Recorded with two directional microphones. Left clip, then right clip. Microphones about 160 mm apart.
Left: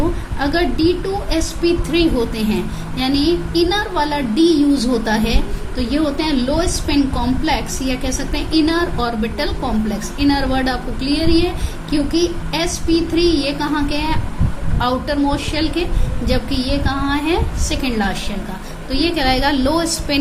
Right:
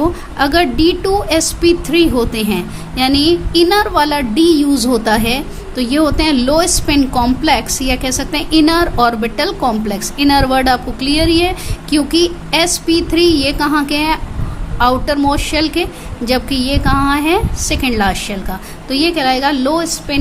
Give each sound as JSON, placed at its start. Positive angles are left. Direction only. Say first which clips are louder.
{"t": 0.3, "sound": "a woman's voice", "louder": "right 6 dB", "side_deg": -40}